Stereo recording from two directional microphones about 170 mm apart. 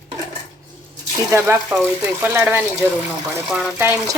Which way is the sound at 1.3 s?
15° right (ahead or behind).